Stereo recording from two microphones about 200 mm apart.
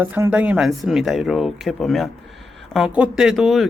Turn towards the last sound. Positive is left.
turn(degrees=0)  # may be behind; listen again after turning